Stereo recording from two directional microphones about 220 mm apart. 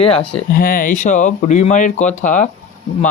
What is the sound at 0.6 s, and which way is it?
Speech, 40° left (ahead or behind).